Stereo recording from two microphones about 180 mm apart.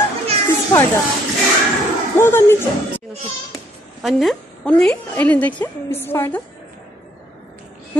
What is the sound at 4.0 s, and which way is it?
A woman's voice, centre (ahead or behind).